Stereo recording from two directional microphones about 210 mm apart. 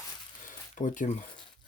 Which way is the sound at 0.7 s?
35° left (ahead or behind).